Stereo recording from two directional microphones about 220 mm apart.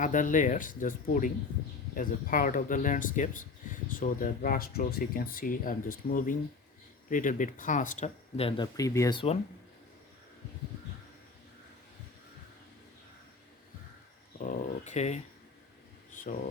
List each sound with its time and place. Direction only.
0.0 s speech: 35° left (ahead or behind)
14.3 s speech: 35° left (ahead or behind)